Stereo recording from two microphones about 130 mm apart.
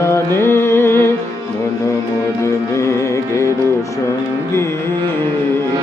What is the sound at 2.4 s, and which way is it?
Music, 20° left (ahead or behind).